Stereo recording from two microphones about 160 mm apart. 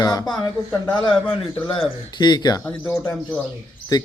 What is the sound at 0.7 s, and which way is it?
Speech, 10° left (ahead or behind).